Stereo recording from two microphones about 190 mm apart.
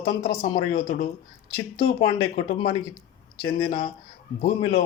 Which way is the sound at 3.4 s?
50° left (ahead or behind).